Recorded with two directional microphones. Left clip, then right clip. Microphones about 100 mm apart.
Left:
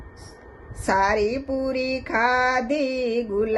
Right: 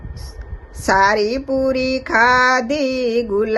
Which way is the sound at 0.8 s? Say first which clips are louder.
Right 6 dB; 35° right (ahead or behind).